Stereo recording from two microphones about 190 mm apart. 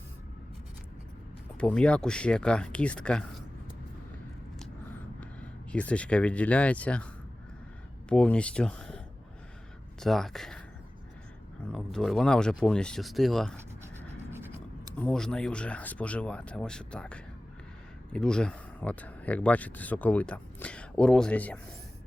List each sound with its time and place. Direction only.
1.5 s speech: 5° left (ahead or behind)
5.2 s speech: 5° left (ahead or behind)
8.1 s speech: 5° left (ahead or behind)
10.0 s speech: centre (ahead or behind)
11.7 s speech: 5° left (ahead or behind)
14.9 s speech: 5° left (ahead or behind)